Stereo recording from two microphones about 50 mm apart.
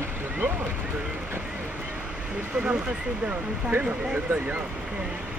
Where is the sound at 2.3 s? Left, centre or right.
Right.